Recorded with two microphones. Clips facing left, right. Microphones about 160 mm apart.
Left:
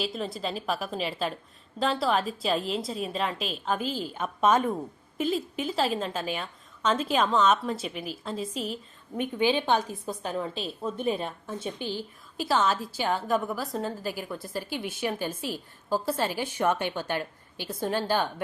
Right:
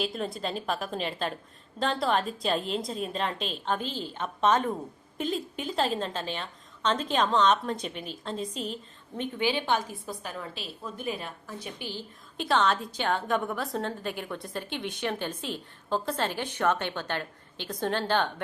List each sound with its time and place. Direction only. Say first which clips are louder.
0.0 s a woman's voice: even; centre (ahead or behind); by 11.7 s 25° left (ahead or behind)
12.4 s a woman's voice: even; 5° left (ahead or behind)